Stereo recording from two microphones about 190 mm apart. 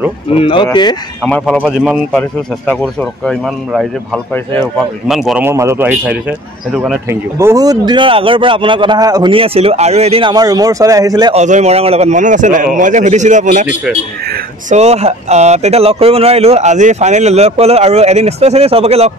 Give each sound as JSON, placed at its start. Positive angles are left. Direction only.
{"t": 0.4, "sound": "speech", "side_deg": 25}
{"t": 1.2, "sound": "speech", "side_deg": 5}
{"t": 4.3, "sound": "speech", "side_deg": 10}
{"t": 4.7, "sound": "speech", "side_deg": 0}
{"t": 5.4, "sound": "a man's voice", "side_deg": -15}
{"t": 11.3, "sound": "speech", "side_deg": -40}